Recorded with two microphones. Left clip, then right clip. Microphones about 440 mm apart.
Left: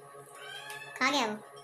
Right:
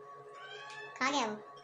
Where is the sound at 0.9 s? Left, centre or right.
Right.